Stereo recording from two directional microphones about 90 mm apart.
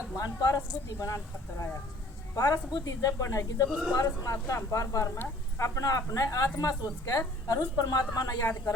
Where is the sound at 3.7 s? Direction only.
10° right (ahead or behind).